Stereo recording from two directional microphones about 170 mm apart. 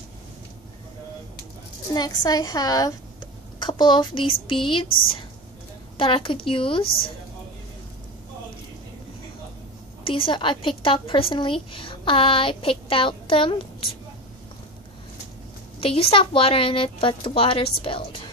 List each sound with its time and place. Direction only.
2.0 s a woman's voice: 25° left (ahead or behind)
5.9 s a woman's voice: 30° left (ahead or behind)
6.8 s a woman's voice: 60° left (ahead or behind)
10.0 s a woman's voice: 30° left (ahead or behind)
15.8 s a woman's voice: 35° left (ahead or behind)